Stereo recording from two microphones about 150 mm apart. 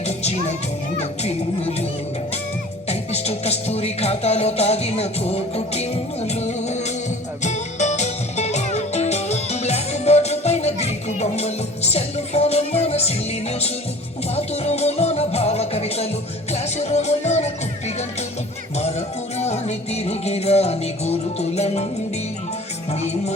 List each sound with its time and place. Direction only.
0.9 s music: 45° left (ahead or behind)
2.9 s music: 45° left (ahead or behind)
22.9 s music: 45° left (ahead or behind)